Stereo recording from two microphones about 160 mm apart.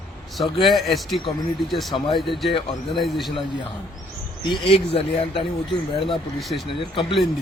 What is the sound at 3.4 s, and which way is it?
Speech, 30° left (ahead or behind).